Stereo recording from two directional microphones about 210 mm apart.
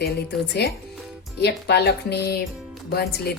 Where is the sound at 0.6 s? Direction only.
55° left (ahead or behind).